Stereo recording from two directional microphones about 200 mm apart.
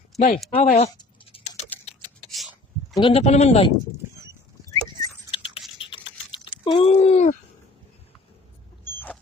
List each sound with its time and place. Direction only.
0.1 s speech: centre (ahead or behind)
0.5 s a man's voice: 30° left (ahead or behind)
0.9 s a sound: 25° left (ahead or behind)
2.3 s a sound: centre (ahead or behind)
3.0 s a man's voice: 30° left (ahead or behind)
4.7 s keys jangling: 20° left (ahead or behind)
5.8 s typing: 25° left (ahead or behind)
6.7 s a man's voice: 30° left (ahead or behind)
8.8 s a sound: 10° left (ahead or behind)